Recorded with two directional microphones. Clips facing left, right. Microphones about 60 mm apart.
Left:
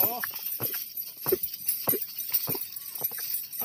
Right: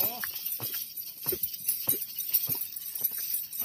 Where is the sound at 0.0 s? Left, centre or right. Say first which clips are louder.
Left 5 dB; left.